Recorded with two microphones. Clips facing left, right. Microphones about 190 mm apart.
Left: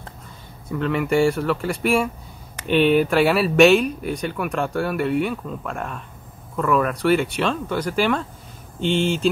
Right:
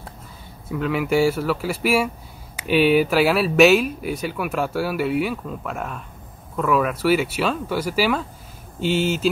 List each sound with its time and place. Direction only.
0.7 s speech: 5° right (ahead or behind)